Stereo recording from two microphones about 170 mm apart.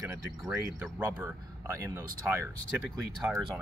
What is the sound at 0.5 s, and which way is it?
Speech, 15° right (ahead or behind).